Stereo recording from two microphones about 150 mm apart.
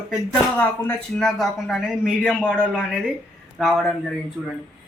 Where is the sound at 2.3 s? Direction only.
10° left (ahead or behind).